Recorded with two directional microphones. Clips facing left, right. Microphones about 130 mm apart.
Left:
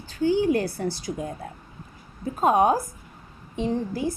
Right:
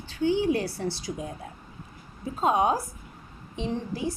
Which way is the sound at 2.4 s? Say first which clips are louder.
Left 4 dB; 50° left (ahead or behind).